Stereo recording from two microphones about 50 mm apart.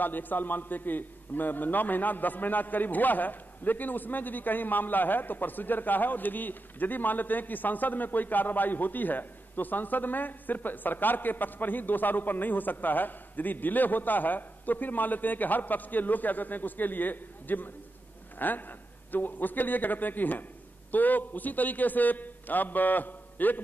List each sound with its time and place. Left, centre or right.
0.0 s a man's voice: left